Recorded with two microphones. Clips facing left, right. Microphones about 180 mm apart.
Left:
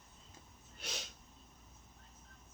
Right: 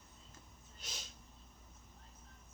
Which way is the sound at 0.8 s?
70° left (ahead or behind).